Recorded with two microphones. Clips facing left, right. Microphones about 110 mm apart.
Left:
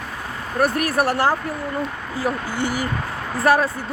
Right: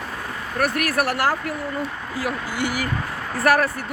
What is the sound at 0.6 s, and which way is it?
Speech, 30° left (ahead or behind).